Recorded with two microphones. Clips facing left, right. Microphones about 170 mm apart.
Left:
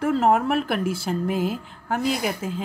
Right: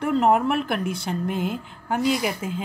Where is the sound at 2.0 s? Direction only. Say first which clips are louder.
Right 2 dB; 55° left (ahead or behind).